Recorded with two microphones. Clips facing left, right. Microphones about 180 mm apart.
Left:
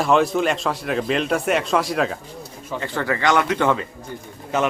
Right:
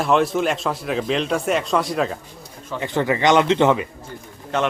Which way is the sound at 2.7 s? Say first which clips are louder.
Right 3 dB; 20° right (ahead or behind).